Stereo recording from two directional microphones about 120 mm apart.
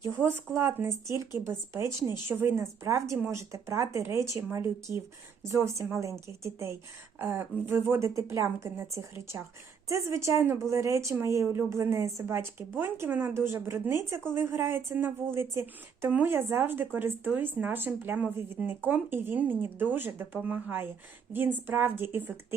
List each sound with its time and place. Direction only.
0.0 s a woman's voice: 20° right (ahead or behind)